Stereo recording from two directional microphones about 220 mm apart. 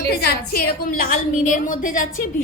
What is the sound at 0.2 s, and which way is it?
A woman's voice, 45° left (ahead or behind).